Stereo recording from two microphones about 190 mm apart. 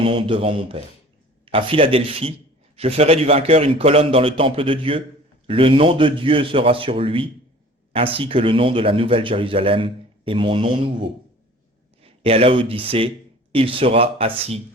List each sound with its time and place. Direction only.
0.0 s a man's voice: 25° right (ahead or behind)